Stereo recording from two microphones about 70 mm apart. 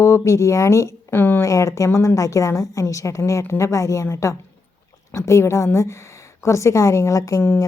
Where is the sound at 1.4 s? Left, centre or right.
Left.